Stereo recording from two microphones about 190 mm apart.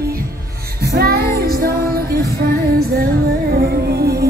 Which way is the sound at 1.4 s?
50° right (ahead or behind).